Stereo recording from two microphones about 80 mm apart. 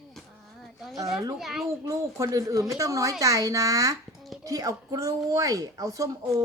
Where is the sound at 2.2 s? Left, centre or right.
Right.